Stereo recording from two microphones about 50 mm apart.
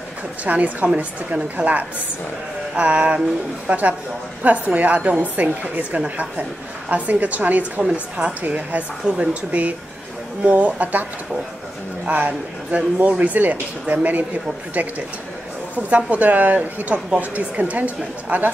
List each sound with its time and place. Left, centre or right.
0.5 s a woman's voice: right
7.9 s a woman's voice: centre
8.4 s speech: right
9.0 s a woman's voice: centre
12.1 s speech: right
16.1 s speech: right